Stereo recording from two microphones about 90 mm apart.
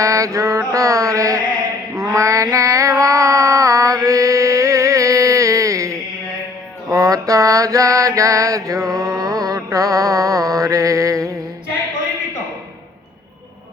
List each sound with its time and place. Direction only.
0.0 s mantra: 35° right (ahead or behind)
2.0 s a sound: 40° right (ahead or behind)
6.9 s mantra: 40° right (ahead or behind)